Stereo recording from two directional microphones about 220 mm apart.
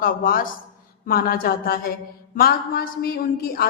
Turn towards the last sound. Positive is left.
turn(degrees=45)  # may be behind; listen again after turning